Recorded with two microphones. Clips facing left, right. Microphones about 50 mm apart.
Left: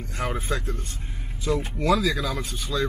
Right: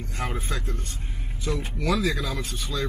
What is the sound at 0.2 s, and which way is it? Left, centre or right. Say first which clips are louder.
Speech: left 3 dB; centre.